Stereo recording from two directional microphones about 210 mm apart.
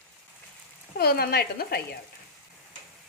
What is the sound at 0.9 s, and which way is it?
Speech, 45° left (ahead or behind).